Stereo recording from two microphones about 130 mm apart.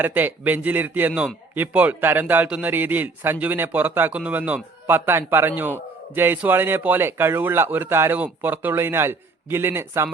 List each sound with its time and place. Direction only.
0.0 s a man's voice: 15° right (ahead or behind)